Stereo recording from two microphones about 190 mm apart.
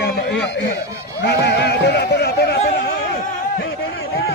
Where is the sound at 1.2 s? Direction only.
65° left (ahead or behind).